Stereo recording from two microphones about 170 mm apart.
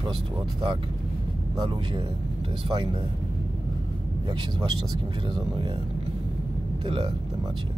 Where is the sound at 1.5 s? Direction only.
25° right (ahead or behind).